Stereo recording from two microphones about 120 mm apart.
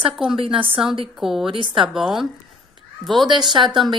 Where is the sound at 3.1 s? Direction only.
40° right (ahead or behind).